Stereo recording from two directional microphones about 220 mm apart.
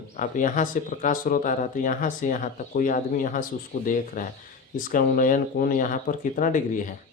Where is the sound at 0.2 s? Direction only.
35° left (ahead or behind).